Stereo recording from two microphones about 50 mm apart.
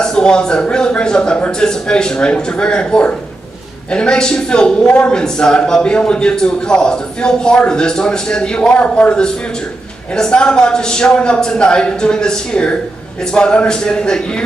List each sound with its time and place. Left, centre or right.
0.0 s a man's voice: centre